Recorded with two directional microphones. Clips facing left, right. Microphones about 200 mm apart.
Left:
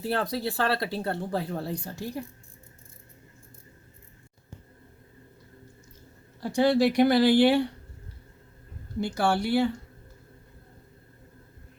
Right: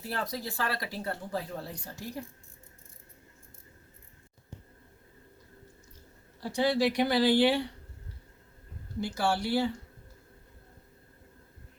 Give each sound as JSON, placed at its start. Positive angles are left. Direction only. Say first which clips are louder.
{"t": 0.1, "sound": "speech", "louder": "left 6 dB", "side_deg": 65}
{"t": 6.4, "sound": "speech", "louder": "left 5 dB", "side_deg": 50}
{"t": 9.0, "sound": "speech", "louder": "left 4 dB", "side_deg": 55}